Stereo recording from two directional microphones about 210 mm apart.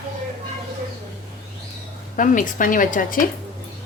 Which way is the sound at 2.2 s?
40° left (ahead or behind).